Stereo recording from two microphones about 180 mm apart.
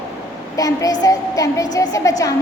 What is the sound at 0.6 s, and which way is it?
Child singing, 20° left (ahead or behind).